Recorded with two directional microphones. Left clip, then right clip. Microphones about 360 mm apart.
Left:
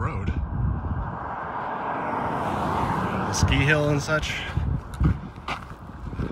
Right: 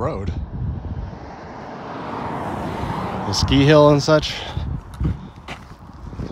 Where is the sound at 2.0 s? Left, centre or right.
Left.